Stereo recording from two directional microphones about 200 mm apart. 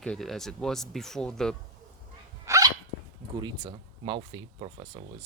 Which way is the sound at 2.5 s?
15° right (ahead or behind).